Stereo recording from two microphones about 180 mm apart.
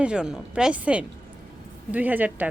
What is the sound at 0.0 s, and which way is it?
A woman's voice, 5° right (ahead or behind).